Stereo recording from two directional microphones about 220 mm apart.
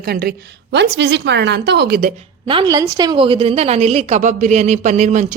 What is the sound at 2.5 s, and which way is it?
A woman's voice, 20° right (ahead or behind).